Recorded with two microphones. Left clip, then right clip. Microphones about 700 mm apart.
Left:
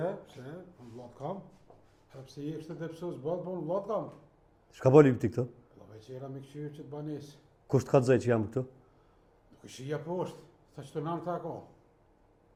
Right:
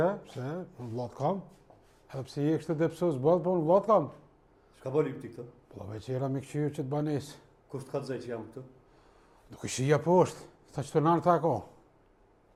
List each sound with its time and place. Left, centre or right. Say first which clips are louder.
0.0 s speech: right 6 dB; right
2.0 s speech: right 11 dB; right
4.7 s speech: left 9 dB; left
5.7 s speech: right 10 dB; right
7.7 s speech: left 11 dB; left
9.5 s speech: right 10 dB; right